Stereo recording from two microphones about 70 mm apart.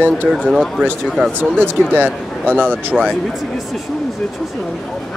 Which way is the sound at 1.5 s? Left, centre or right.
Right.